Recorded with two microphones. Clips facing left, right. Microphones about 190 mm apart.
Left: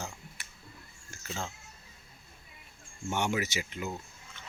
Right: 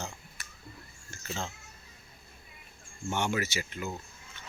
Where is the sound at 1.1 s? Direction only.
10° left (ahead or behind).